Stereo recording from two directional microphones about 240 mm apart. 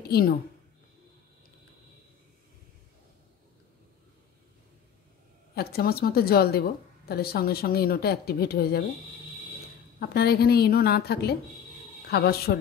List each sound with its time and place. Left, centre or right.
5.5 s a woman's voice: left
9.9 s a woman's voice: left